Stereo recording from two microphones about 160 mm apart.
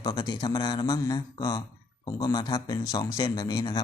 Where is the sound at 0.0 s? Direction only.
25° left (ahead or behind).